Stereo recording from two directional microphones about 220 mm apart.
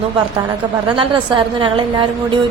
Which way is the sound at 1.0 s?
20° right (ahead or behind).